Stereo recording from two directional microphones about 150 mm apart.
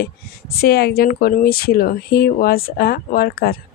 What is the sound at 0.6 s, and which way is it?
Speech, 90° left.